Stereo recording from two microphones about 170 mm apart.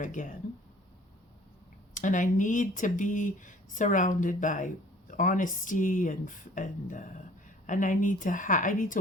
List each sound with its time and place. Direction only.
0.0 s speech: 50° left (ahead or behind)
1.9 s speech: 50° left (ahead or behind)